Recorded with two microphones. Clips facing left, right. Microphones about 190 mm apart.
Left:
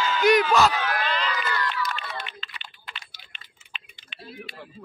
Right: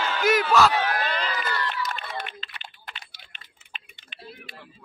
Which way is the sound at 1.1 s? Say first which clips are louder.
Left 1 dB; 50° right (ahead or behind).